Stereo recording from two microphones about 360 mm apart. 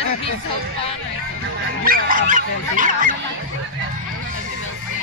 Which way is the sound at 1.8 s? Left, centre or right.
Right.